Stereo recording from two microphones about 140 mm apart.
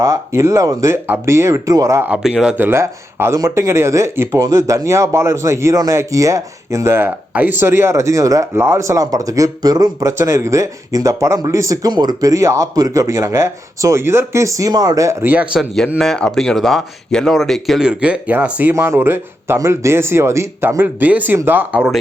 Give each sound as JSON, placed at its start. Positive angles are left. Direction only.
{"t": 0.0, "sound": "speech", "side_deg": -20}
{"t": 2.0, "sound": "speech", "side_deg": -5}
{"t": 16.0, "sound": "speech", "side_deg": 5}